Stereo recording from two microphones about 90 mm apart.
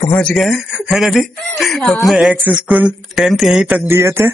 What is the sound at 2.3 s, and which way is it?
Speech, 15° right (ahead or behind).